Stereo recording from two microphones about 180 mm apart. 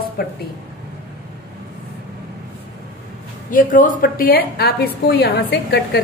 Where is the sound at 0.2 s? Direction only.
55° left (ahead or behind).